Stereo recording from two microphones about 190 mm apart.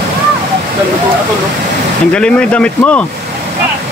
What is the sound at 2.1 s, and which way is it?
Speech, 5° left (ahead or behind).